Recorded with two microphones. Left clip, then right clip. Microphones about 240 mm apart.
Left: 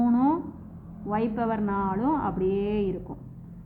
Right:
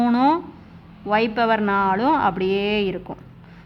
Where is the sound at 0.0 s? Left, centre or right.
Right.